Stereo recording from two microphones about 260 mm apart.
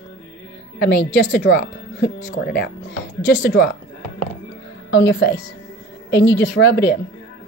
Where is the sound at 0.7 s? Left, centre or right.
Left.